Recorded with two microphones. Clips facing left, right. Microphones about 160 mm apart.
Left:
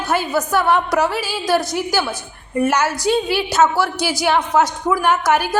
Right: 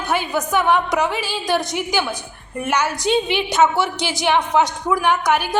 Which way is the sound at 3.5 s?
20° right (ahead or behind).